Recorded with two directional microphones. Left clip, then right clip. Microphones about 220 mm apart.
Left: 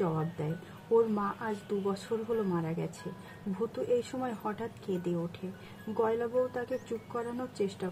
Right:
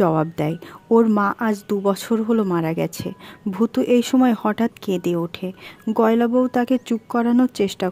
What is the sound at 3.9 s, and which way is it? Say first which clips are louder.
Speech: right 15 dB; 50° right (ahead or behind).